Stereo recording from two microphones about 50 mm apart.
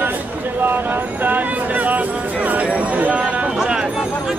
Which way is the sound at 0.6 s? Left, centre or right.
Right.